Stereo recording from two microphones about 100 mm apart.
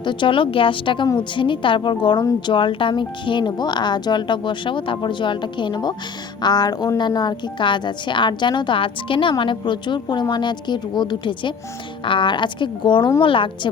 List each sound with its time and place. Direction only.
0.0 s speech: 55° left (ahead or behind)